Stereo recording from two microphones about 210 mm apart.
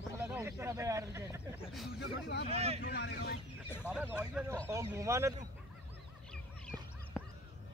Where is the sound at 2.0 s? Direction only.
55° left (ahead or behind).